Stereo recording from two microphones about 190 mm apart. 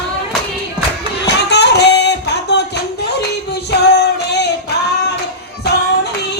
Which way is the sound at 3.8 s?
60° left (ahead or behind).